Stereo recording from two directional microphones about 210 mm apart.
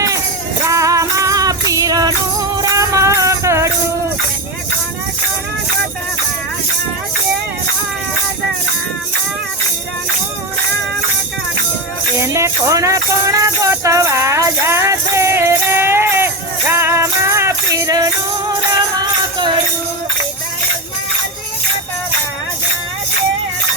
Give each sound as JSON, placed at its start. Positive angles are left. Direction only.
{"t": 0.6, "sound": "music", "side_deg": -15}
{"t": 12.2, "sound": "music", "side_deg": -15}